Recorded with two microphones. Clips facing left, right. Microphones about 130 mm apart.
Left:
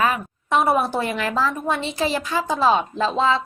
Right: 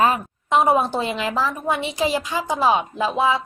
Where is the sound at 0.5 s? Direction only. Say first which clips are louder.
Right 1 dB; 15° right (ahead or behind).